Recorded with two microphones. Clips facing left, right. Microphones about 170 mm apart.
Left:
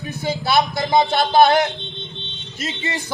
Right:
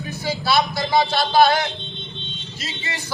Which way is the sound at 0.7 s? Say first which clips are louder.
Left 2 dB; 20° left (ahead or behind).